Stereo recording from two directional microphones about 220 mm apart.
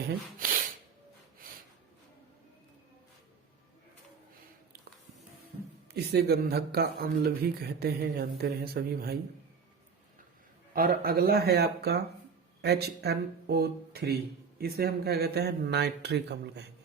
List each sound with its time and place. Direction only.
0.3 s a sound: 40° right (ahead or behind)
5.9 s speech: 50° right (ahead or behind)
10.8 s speech: 45° right (ahead or behind)